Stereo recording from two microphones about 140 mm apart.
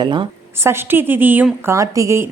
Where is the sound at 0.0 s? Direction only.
35° right (ahead or behind).